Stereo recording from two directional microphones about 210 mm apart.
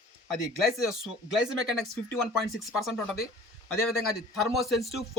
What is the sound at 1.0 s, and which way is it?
Speech, centre (ahead or behind).